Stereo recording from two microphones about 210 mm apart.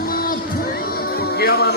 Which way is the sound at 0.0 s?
45° left (ahead or behind).